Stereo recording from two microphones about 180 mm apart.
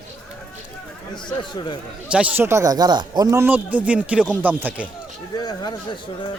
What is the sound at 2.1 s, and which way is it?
Speech, 10° right (ahead or behind).